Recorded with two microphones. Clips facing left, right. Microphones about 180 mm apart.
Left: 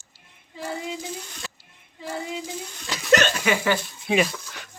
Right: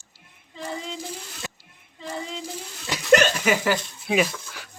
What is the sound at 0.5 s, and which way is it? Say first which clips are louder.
Child singing: left 2 dB; 10° left (ahead or behind).